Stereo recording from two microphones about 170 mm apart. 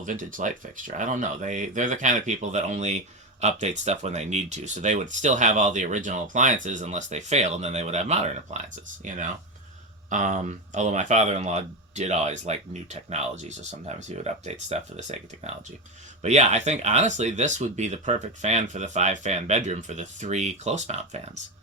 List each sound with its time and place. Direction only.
0.0 s speech: 50° right (ahead or behind)